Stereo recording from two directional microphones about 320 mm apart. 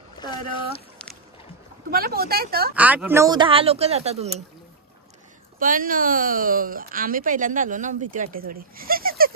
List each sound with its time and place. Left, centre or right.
0.2 s speech: centre
1.9 s speech: right
2.7 s speech: centre
5.6 s speech: right